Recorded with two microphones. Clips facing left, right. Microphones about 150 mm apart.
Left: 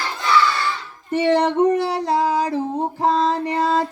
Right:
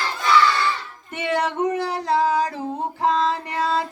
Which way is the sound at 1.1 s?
35° left (ahead or behind).